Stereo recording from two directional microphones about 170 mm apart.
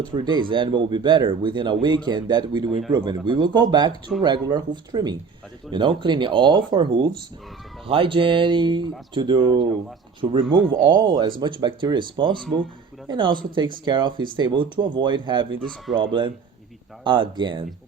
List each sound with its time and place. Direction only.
0.0 s speech: 25° right (ahead or behind)